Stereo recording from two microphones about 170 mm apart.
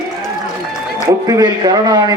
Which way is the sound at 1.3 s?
25° right (ahead or behind).